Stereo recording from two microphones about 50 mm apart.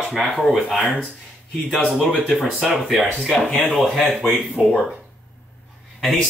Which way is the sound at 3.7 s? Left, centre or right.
Centre.